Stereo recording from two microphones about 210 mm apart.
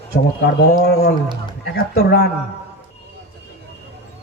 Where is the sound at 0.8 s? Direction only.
50° left (ahead or behind).